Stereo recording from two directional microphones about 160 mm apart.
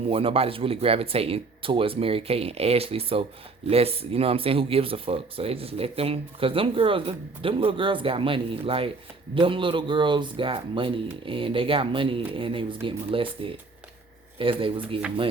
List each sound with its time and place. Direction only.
0.0 s speech: 35° right (ahead or behind)